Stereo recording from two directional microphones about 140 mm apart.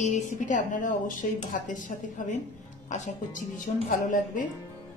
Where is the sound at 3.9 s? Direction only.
75° left (ahead or behind).